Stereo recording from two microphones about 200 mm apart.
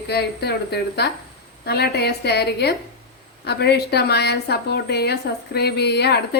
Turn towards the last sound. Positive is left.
turn(degrees=55)  # may be behind; listen again after turning